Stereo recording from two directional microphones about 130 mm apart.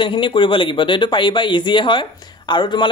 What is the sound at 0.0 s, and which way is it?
Speech, 40° left (ahead or behind).